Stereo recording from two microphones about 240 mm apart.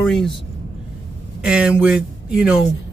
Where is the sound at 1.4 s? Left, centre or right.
Centre.